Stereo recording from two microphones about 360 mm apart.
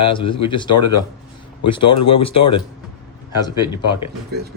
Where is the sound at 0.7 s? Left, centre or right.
Left.